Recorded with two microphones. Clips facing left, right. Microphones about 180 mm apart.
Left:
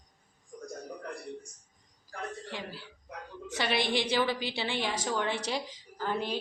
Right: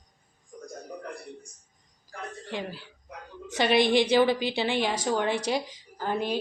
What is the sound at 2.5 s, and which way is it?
A woman's voice, 15° right (ahead or behind).